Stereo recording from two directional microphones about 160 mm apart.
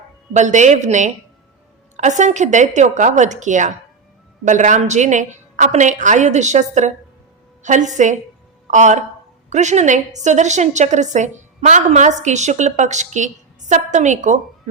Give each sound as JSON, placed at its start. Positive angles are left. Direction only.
{"t": 0.3, "sound": "a woman's voice", "side_deg": -50}